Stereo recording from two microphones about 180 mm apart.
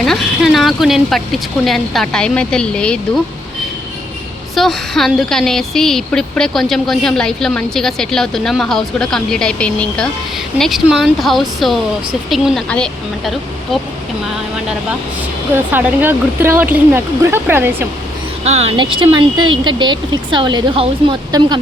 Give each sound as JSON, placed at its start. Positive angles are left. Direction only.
{"t": 0.0, "sound": "speech", "side_deg": 0}
{"t": 4.5, "sound": "a woman's voice", "side_deg": 0}
{"t": 15.7, "sound": "speech", "side_deg": -10}
{"t": 18.4, "sound": "speech", "side_deg": -35}